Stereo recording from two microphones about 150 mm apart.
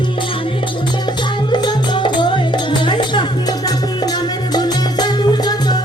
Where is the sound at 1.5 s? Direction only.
30° left (ahead or behind).